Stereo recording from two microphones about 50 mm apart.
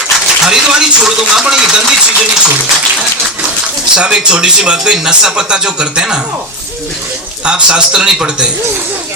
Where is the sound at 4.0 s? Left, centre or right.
Centre.